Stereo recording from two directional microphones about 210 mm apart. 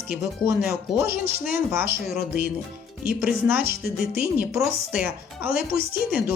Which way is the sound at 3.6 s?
50° right (ahead or behind).